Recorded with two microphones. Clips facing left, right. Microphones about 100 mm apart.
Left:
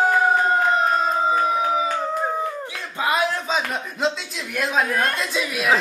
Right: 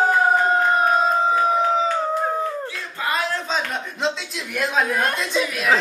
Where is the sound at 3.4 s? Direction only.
5° left (ahead or behind).